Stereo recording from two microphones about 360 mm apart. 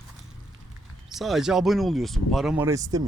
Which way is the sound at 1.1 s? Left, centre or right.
Centre.